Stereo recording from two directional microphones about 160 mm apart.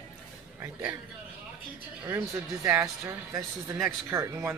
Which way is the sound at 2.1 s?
15° right (ahead or behind).